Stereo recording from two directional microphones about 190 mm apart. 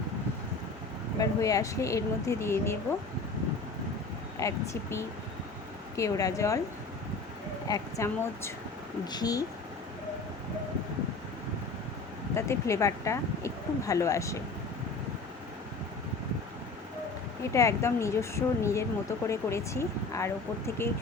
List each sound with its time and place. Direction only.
1.2 s speech: 15° left (ahead or behind)
4.4 s speech: 15° left (ahead or behind)
7.7 s speech: 15° left (ahead or behind)
12.3 s speech: 15° left (ahead or behind)
17.5 s speech: 15° left (ahead or behind)